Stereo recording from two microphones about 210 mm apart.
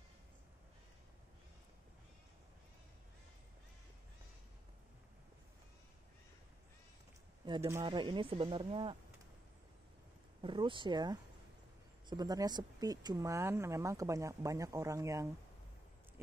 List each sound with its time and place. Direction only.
7.4 s speech: 15° right (ahead or behind)
10.4 s speech: 25° right (ahead or behind)